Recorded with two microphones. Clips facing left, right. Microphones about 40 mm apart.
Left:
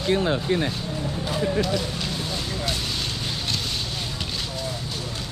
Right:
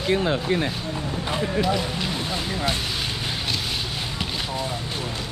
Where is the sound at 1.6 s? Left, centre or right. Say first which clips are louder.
Right 2 dB; centre.